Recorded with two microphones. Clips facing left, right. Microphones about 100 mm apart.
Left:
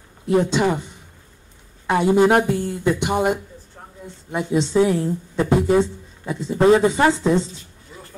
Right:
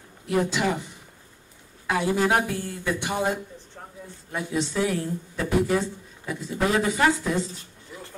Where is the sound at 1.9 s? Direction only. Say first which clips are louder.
Left 7 dB; 20° left (ahead or behind).